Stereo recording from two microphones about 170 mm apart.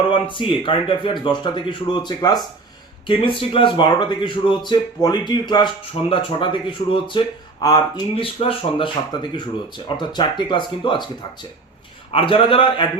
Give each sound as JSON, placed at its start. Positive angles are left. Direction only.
{"t": 0.1, "sound": "speech", "side_deg": 30}
{"t": 8.1, "sound": "speech", "side_deg": 35}
{"t": 12.1, "sound": "speech", "side_deg": 30}